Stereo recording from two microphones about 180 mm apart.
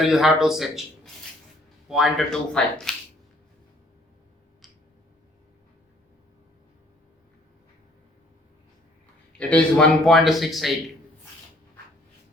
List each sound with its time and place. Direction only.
0.0 s a man's voice: centre (ahead or behind)
9.4 s a man's voice: 5° left (ahead or behind)